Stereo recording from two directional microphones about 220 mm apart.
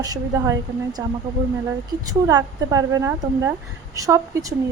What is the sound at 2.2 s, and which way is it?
Speech, 15° right (ahead or behind).